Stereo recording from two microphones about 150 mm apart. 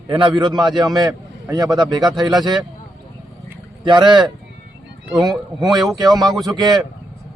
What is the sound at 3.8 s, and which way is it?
A man's voice, 30° right (ahead or behind).